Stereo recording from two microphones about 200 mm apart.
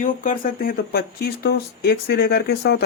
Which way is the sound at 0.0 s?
40° left (ahead or behind).